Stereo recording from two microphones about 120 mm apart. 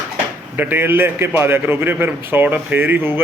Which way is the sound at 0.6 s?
15° right (ahead or behind).